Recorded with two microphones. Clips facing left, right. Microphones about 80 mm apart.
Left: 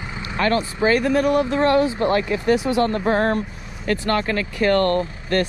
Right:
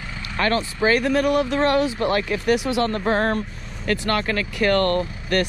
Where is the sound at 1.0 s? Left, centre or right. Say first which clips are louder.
Left 1 dB; left.